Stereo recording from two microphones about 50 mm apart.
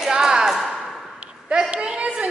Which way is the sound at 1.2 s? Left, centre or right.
Right.